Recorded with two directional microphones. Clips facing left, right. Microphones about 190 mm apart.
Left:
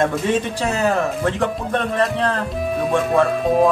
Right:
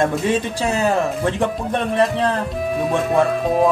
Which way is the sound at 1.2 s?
15° right (ahead or behind).